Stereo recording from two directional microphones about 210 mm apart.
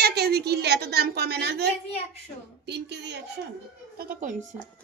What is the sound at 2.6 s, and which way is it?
Speech, 55° right (ahead or behind).